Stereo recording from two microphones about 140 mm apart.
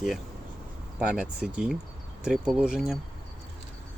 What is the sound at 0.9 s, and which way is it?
Speech, 5° right (ahead or behind).